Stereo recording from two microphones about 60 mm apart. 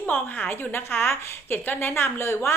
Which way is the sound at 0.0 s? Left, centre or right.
Left.